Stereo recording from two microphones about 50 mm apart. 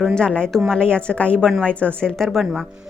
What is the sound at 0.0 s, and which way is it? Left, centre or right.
A woman's voice, centre.